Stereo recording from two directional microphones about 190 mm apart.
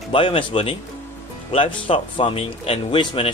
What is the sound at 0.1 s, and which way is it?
Speech, 25° left (ahead or behind).